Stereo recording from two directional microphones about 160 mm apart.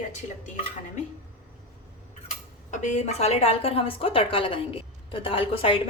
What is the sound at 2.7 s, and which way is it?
A woman's voice, 50° left (ahead or behind).